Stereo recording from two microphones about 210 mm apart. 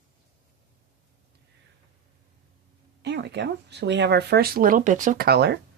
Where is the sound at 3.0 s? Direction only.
55° right (ahead or behind).